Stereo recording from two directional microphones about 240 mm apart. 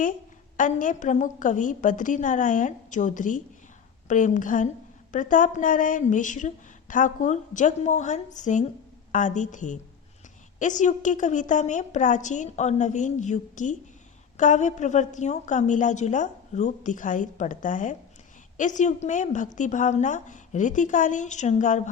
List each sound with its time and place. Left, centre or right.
0.5 s a woman's voice: left